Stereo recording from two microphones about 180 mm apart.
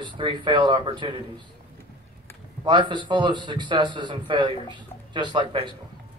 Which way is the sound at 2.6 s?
25° right (ahead or behind).